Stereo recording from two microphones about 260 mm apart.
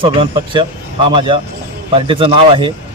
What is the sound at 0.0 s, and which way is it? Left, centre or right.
A man's voice, centre.